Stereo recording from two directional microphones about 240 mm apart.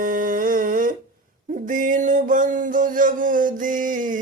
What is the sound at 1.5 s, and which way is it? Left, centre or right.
Music, right.